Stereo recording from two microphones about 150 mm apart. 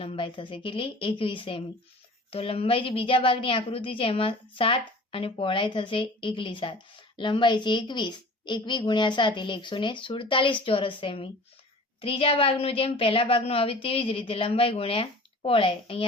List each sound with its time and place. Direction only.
0.0 s a woman's voice: 35° left (ahead or behind)